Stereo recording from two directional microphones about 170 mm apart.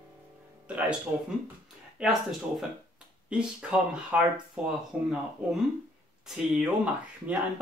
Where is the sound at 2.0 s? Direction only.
5° right (ahead or behind).